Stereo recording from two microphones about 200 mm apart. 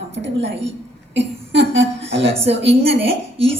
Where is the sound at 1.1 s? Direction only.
65° right (ahead or behind).